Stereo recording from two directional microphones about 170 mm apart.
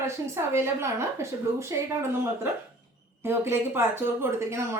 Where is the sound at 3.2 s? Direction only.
15° right (ahead or behind).